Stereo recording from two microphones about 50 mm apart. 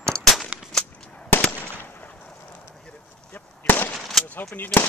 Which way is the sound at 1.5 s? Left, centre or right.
Left.